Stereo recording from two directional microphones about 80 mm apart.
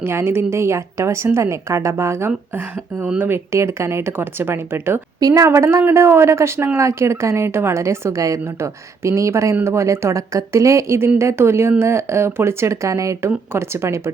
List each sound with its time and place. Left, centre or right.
0.0 s a woman's voice: right
5.2 s a woman's voice: right
5.5 s a woman's voice: right